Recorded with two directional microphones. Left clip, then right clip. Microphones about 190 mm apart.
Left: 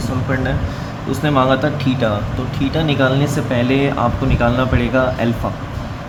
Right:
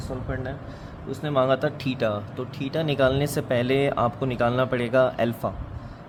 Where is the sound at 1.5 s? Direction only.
45° right (ahead or behind).